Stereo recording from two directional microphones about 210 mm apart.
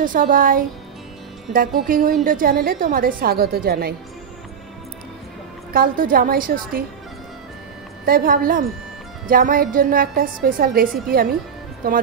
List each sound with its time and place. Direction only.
0.0 s music: 40° right (ahead or behind)
2.2 s a woman's voice: 40° right (ahead or behind)
5.7 s a woman's voice: 40° right (ahead or behind)
8.0 s music: 40° right (ahead or behind)
9.3 s a woman's voice: 40° right (ahead or behind)